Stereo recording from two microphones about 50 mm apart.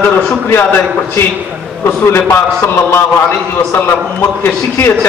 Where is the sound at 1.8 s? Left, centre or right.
Left.